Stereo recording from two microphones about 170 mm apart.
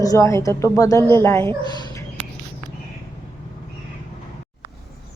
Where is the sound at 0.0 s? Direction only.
20° left (ahead or behind).